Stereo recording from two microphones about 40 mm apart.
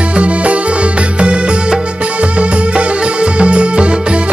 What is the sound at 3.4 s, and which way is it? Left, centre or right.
Music, right.